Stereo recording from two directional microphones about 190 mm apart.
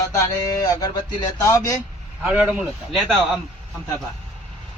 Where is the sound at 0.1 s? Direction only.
15° left (ahead or behind).